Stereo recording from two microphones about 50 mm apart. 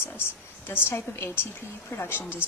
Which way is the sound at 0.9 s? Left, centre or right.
Left.